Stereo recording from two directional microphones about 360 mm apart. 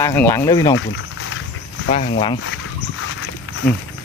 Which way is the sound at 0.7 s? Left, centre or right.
Left.